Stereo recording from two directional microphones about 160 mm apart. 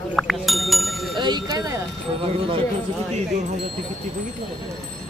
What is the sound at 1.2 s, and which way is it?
Speech, 25° right (ahead or behind).